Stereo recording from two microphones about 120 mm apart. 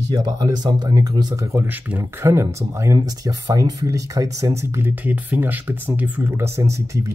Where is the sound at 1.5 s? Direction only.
20° right (ahead or behind).